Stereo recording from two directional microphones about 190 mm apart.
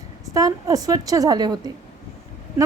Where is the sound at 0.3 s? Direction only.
20° right (ahead or behind).